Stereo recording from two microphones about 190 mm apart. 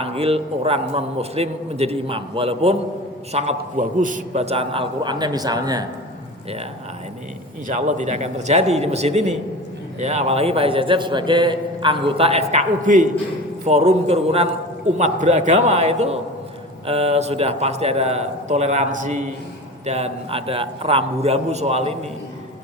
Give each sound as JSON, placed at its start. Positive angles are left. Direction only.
{"t": 0.0, "sound": "a man's voice", "side_deg": -30}
{"t": 7.7, "sound": "a man's voice", "side_deg": -40}